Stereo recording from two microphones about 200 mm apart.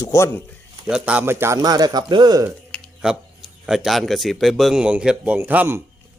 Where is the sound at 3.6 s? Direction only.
Centre (ahead or behind).